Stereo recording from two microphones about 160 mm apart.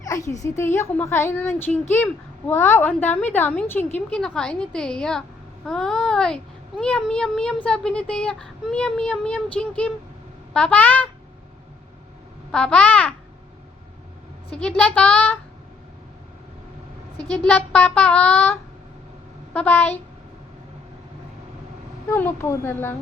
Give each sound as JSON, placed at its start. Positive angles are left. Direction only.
{"t": 0.0, "sound": "a sound", "side_deg": 20}
{"t": 0.4, "sound": "a woman's voice", "side_deg": 15}
{"t": 12.5, "sound": "a child's voice", "side_deg": 5}
{"t": 14.5, "sound": "a woman's voice", "side_deg": 5}
{"t": 17.3, "sound": "a woman's voice", "side_deg": 5}
{"t": 19.5, "sound": "a woman's voice", "side_deg": 10}
{"t": 22.1, "sound": "a woman's voice", "side_deg": 15}